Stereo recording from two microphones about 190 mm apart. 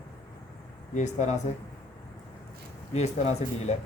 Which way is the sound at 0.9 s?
40° left (ahead or behind).